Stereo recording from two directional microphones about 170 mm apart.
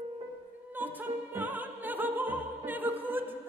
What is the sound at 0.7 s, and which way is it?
Opera, 10° right (ahead or behind).